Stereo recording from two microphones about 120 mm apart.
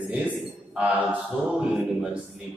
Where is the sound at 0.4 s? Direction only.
5° right (ahead or behind).